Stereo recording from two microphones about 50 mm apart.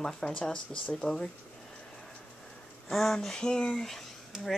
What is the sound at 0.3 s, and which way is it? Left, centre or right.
Speech, centre.